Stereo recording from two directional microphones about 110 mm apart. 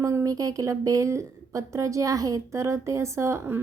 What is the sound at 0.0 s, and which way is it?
A woman's voice, 25° right (ahead or behind).